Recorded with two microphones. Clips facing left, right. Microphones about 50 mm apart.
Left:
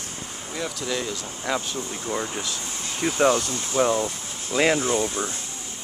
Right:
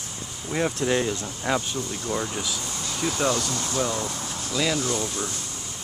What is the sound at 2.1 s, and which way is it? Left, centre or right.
Speech, centre.